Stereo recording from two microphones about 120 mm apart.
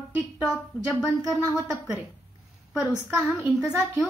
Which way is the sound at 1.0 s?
20° left (ahead or behind).